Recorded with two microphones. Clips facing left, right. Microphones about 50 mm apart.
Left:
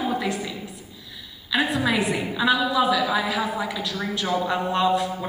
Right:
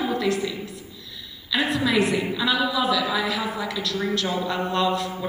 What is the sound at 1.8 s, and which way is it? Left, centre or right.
A woman's voice, centre.